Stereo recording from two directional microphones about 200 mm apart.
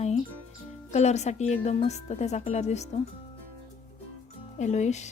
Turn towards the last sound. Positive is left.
turn(degrees=35)  # may be behind; listen again after turning